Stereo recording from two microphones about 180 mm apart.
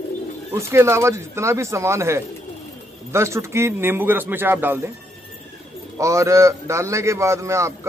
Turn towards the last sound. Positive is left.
turn(degrees=-15)  # may be behind; listen again after turning